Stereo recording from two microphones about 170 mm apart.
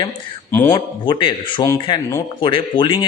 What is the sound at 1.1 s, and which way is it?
A man's voice, 30° left (ahead or behind).